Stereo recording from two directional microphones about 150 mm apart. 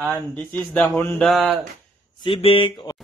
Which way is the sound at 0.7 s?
10° left (ahead or behind).